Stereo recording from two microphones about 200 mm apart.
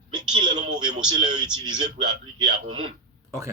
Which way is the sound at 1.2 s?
20° right (ahead or behind).